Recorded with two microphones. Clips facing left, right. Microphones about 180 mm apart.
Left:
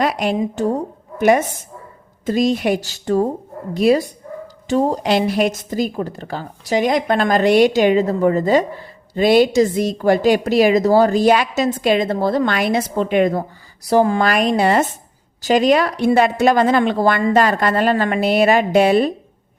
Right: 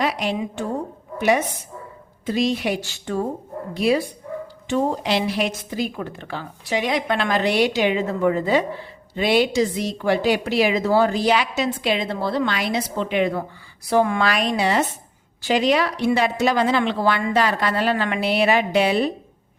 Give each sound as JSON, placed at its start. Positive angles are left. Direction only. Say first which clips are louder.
{"t": 0.0, "sound": "a woman's voice", "louder": "left 4 dB", "side_deg": 50}
{"t": 0.3, "sound": "a woman's voice", "louder": "left 6 dB", "side_deg": 40}